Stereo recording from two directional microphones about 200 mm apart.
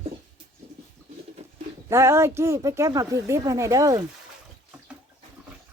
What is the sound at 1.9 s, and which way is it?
Speech, 15° right (ahead or behind).